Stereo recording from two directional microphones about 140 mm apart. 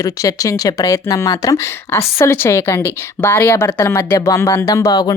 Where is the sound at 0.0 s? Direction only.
25° left (ahead or behind).